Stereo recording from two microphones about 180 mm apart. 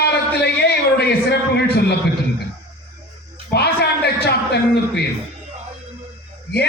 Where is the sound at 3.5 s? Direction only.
65° left (ahead or behind).